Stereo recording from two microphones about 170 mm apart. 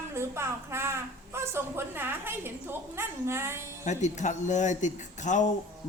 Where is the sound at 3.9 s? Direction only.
45° left (ahead or behind).